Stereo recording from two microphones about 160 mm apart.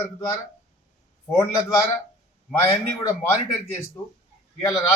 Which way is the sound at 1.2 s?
15° left (ahead or behind).